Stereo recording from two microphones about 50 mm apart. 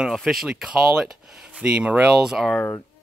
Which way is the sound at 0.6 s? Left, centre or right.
Centre.